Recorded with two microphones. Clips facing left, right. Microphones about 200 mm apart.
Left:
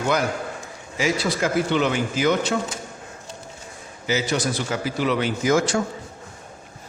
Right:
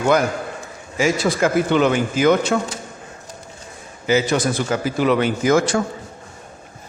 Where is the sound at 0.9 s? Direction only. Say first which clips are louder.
Right 4 dB; 50° right (ahead or behind).